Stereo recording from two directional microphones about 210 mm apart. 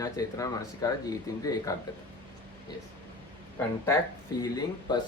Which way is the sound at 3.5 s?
15° left (ahead or behind).